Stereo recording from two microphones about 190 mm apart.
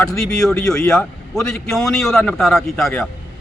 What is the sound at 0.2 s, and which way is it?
A man's voice, 5° left (ahead or behind).